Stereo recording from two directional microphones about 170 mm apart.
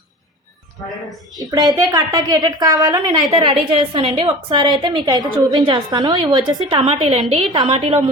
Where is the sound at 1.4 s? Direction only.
25° right (ahead or behind).